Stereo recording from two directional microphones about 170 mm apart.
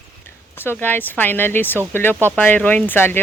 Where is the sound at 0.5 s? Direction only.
10° left (ahead or behind).